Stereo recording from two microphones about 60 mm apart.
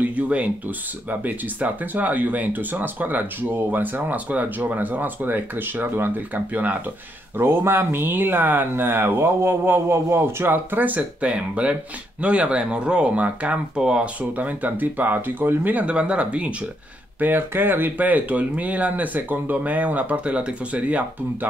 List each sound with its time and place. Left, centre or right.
0.0 s a sound: right
1.2 s speech: right
7.3 s speech: right; by 14.0 s centre
14.3 s speech: right
17.2 s speech: right